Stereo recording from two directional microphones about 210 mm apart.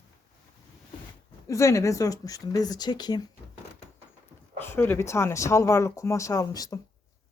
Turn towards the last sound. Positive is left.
turn(degrees=15)  # may be behind; listen again after turning